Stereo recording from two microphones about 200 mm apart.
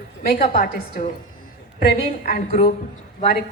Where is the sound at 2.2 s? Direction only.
45° left (ahead or behind).